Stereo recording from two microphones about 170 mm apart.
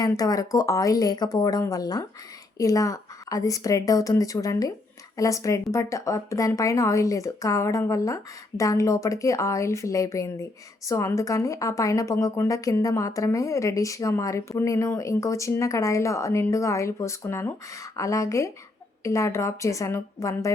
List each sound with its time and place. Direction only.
0.0 s a woman's voice: 20° left (ahead or behind)